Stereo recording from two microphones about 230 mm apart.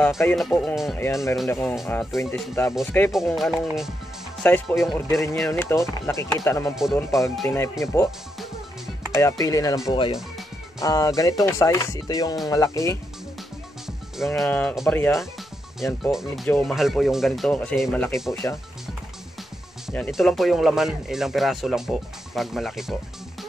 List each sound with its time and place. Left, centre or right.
0.0 s speech: centre
6.7 s speech: centre
7.4 s speech: centre
8.4 s music: centre
9.1 s speech: centre
14.1 s speech: centre
19.9 s speech: centre